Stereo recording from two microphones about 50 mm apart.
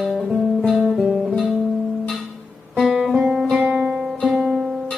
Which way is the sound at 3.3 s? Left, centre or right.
Centre.